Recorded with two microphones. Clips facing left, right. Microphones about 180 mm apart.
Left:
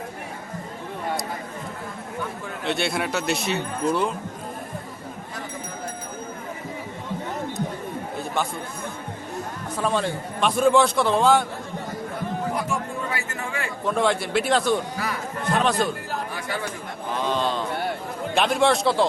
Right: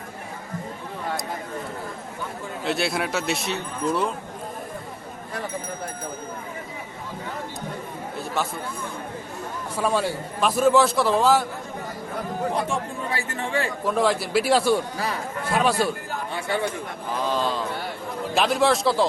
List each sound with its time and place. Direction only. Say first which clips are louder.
2.6 s a man's voice: even; centre (ahead or behind)
9.7 s a man's voice: right 1 dB; 10° right (ahead or behind)
12.5 s chatter: right 1 dB; 30° right (ahead or behind)
13.8 s a man's voice: left 2 dB; centre (ahead or behind)
17.2 s a man's voice: even; centre (ahead or behind)